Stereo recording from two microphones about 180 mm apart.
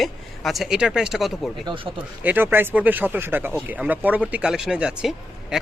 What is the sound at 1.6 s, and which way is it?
Speech, 30° right (ahead or behind).